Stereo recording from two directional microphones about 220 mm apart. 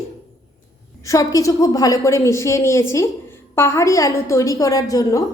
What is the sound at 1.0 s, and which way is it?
A woman's voice, 15° left (ahead or behind).